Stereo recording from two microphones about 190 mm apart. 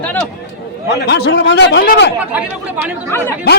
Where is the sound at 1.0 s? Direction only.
60° left (ahead or behind).